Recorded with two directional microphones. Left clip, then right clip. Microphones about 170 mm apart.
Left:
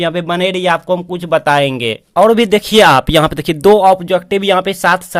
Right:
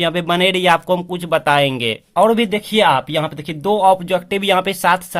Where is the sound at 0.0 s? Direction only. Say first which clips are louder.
Left 1 dB; 10° left (ahead or behind).